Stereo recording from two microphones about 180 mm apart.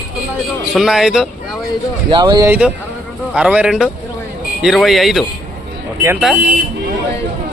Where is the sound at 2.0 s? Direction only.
25° right (ahead or behind).